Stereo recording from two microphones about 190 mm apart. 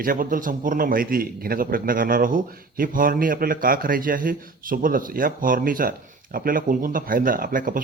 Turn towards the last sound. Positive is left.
turn(degrees=-45)  # may be behind; listen again after turning